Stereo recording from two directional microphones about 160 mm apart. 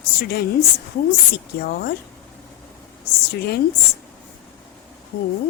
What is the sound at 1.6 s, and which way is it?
Speech, 75° left (ahead or behind).